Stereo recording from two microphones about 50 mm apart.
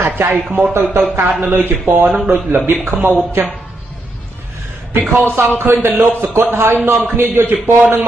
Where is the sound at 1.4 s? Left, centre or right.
Right.